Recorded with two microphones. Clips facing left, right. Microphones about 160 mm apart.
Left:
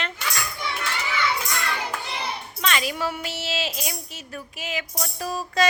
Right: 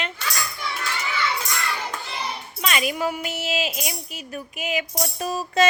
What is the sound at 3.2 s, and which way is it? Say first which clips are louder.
Music: right 3 dB; 15° right (ahead or behind).